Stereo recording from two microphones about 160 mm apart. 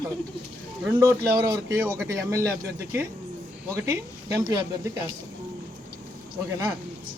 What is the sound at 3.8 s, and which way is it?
Speech, 15° right (ahead or behind).